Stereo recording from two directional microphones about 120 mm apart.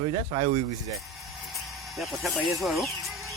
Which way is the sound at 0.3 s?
55° right (ahead or behind).